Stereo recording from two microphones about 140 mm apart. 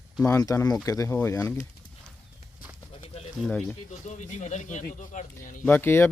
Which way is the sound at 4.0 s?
60° left (ahead or behind).